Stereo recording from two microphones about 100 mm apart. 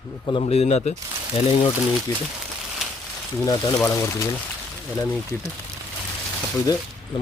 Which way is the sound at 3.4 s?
35° left (ahead or behind).